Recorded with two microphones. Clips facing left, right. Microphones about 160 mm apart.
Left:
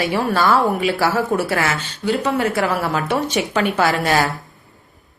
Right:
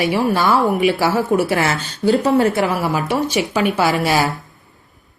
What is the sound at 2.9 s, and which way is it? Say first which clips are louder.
A woman's voice: right 1 dB; 5° right (ahead or behind).